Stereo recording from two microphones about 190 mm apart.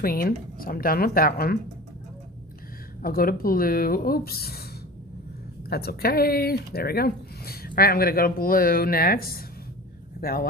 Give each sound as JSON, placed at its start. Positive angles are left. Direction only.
{"t": 0.0, "sound": "speech", "side_deg": 50}
{"t": 3.0, "sound": "speech", "side_deg": 50}
{"t": 5.6, "sound": "speech", "side_deg": 55}